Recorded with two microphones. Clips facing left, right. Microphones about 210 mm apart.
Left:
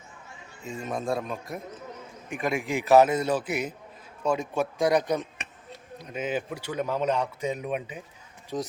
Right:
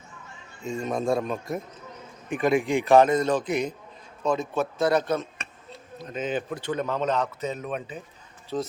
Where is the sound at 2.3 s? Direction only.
Centre (ahead or behind).